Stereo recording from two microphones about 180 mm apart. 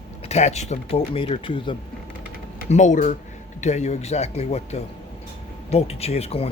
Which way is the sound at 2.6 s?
40° left (ahead or behind).